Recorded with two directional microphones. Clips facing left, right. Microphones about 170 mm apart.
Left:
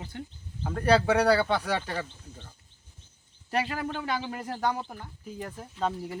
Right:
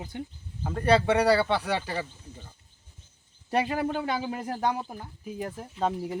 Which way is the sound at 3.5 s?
25° right (ahead or behind).